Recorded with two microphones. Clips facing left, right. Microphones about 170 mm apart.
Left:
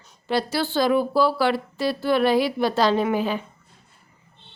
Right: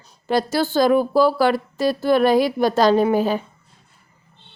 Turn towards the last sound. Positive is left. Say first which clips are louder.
# right 5 dB
turn(degrees=-40)  # may be behind; listen again after turning